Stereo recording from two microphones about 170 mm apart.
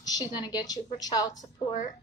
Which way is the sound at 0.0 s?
25° left (ahead or behind).